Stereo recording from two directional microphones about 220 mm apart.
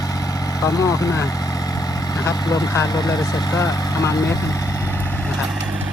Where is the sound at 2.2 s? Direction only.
15° left (ahead or behind).